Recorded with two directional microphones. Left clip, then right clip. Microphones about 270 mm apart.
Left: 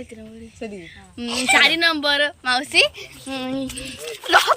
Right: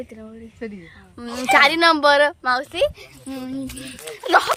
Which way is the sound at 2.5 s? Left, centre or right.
Right.